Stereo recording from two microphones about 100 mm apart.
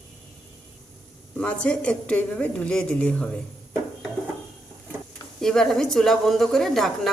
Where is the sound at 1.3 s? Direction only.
10° left (ahead or behind).